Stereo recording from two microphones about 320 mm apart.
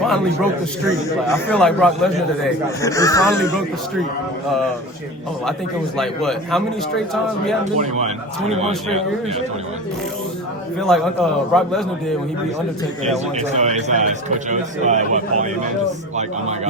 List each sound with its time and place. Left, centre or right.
0.9 s a man's voice: centre
6.0 s a man's voice: centre
7.6 s a man's voice: right
10.8 s a man's voice: centre
13.1 s a man's voice: right